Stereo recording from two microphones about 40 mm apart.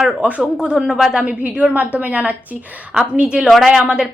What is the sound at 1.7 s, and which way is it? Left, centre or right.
Speech, right.